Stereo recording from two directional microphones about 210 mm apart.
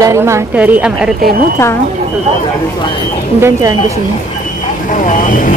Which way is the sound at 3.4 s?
15° right (ahead or behind).